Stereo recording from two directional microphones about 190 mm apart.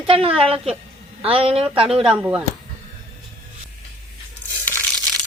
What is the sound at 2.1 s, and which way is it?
Speech, 5° right (ahead or behind).